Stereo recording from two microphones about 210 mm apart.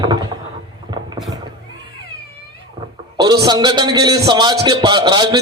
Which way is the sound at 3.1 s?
20° right (ahead or behind).